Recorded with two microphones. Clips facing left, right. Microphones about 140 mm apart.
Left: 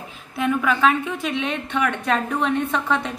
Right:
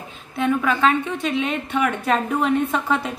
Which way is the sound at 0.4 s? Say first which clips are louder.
Right 1 dB; centre (ahead or behind).